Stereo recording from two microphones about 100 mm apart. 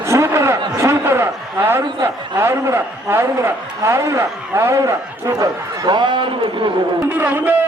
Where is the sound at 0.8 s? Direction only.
25° right (ahead or behind); by 6.7 s 55° right (ahead or behind).